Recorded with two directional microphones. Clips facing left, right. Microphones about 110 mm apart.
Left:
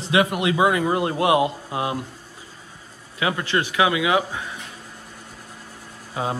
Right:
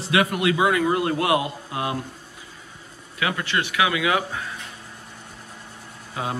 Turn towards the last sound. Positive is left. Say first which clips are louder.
# left 3 dB
turn(degrees=25)  # may be behind; listen again after turning